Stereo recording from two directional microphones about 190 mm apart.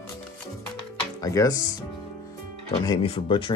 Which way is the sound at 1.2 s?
15° left (ahead or behind).